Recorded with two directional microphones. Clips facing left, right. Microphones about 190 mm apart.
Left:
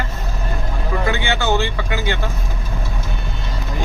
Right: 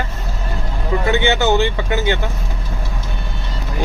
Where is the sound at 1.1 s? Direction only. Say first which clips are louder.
Right 6 dB; 20° right (ahead or behind).